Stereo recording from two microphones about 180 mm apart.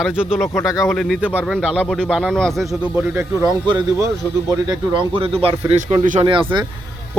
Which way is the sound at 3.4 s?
20° right (ahead or behind).